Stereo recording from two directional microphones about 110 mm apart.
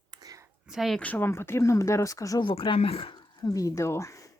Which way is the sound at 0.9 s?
15° left (ahead or behind).